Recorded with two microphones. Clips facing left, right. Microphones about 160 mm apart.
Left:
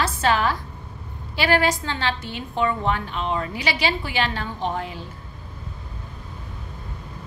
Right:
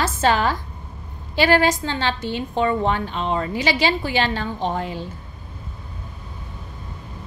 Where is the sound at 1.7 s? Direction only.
25° right (ahead or behind).